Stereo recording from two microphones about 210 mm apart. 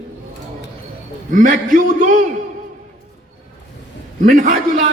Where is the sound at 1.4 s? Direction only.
40° right (ahead or behind).